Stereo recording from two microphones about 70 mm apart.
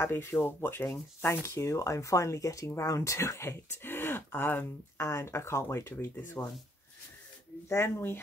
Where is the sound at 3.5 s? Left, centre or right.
Left.